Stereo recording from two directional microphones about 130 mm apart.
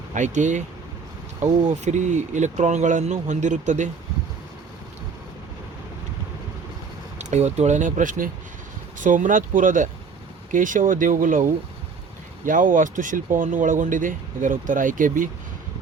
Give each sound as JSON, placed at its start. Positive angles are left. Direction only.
{"t": 0.1, "sound": "speech", "side_deg": -70}
{"t": 7.2, "sound": "speech", "side_deg": -60}
{"t": 12.5, "sound": "speech", "side_deg": -90}